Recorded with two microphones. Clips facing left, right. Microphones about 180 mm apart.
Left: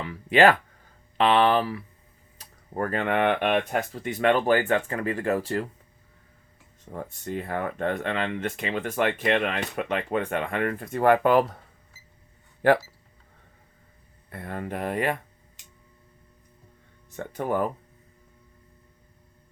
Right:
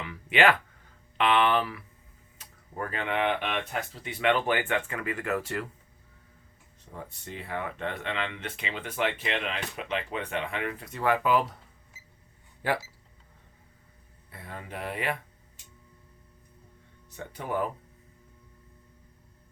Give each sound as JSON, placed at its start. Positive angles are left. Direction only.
{"t": 0.0, "sound": "speech", "side_deg": 35}
{"t": 2.4, "sound": "speech", "side_deg": 45}
{"t": 6.9, "sound": "speech", "side_deg": 50}
{"t": 14.3, "sound": "speech", "side_deg": 55}
{"t": 17.1, "sound": "speech", "side_deg": 50}